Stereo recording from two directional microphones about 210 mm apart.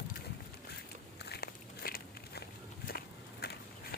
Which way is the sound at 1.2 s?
50° left (ahead or behind).